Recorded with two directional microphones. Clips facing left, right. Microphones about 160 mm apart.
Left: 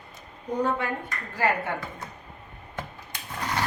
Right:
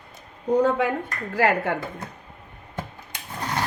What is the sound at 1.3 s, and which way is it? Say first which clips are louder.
Speech: right 5 dB; 85° right.